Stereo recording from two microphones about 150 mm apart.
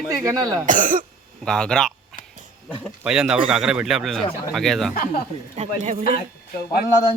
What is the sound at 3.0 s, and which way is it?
Speech, 5° right (ahead or behind).